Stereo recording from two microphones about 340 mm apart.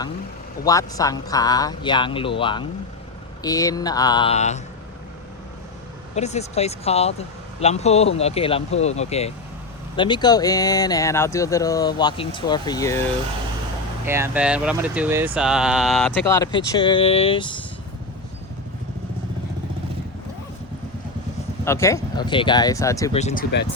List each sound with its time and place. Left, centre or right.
0.6 s speech: centre
6.1 s speech: centre
14.0 s speech: centre
21.6 s speech: centre
23.2 s speech: left